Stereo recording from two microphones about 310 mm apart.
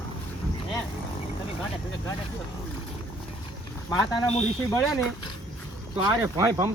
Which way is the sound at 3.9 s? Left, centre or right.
Centre.